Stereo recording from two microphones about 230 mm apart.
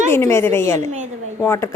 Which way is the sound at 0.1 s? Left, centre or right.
Centre.